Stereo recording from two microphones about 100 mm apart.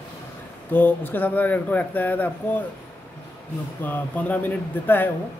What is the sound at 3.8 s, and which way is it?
Speech, 15° left (ahead or behind).